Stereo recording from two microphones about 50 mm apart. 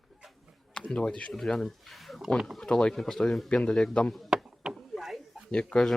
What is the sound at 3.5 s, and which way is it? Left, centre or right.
Speech, centre.